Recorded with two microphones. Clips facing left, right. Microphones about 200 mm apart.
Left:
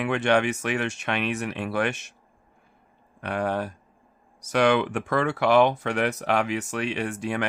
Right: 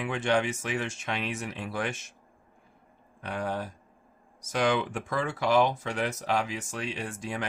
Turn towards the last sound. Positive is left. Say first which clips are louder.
# left 7 dB
turn(degrees=65)  # may be behind; listen again after turning